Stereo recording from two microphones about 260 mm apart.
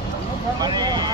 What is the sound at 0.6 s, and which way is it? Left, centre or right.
Vehicle, centre.